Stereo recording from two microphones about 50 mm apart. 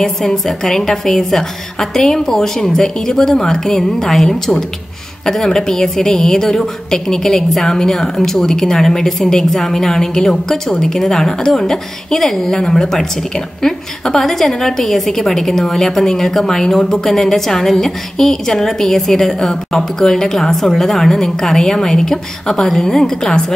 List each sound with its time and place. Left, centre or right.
0.0 s a woman's voice: centre